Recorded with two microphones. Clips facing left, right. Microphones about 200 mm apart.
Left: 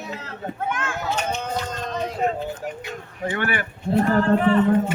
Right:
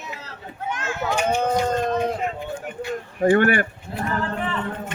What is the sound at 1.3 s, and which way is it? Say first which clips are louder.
Speech: right 7 dB; 55° right (ahead or behind).